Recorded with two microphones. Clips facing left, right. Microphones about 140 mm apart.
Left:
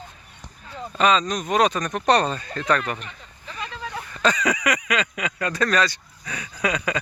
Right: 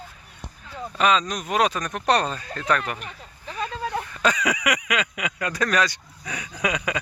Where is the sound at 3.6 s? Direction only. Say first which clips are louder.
Right 5 dB; 40° right (ahead or behind).